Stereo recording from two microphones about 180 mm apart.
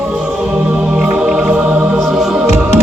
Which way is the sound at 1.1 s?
5° right (ahead or behind).